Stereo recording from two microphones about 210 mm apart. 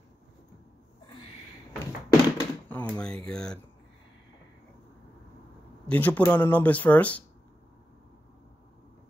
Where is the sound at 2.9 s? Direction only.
5° left (ahead or behind).